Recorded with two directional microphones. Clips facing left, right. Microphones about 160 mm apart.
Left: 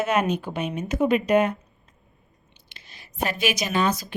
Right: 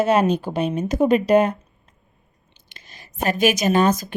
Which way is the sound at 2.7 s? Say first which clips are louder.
Right 3 dB; 45° right (ahead or behind).